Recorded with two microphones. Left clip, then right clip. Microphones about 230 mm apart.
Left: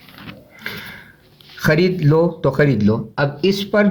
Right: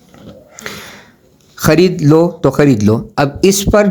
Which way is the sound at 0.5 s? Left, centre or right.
Right.